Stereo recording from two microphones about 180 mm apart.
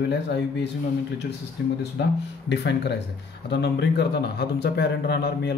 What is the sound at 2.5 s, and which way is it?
A man's voice, 70° left (ahead or behind).